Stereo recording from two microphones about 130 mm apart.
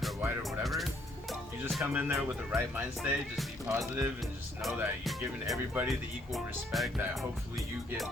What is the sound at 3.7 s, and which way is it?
Speech, 10° right (ahead or behind).